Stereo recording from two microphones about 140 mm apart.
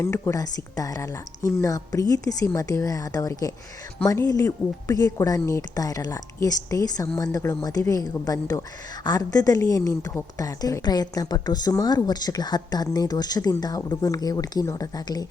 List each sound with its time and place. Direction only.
0.0 s a woman's voice: 20° left (ahead or behind)